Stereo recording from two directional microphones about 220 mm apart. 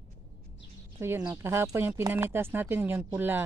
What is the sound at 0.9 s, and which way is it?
Speech, 10° right (ahead or behind).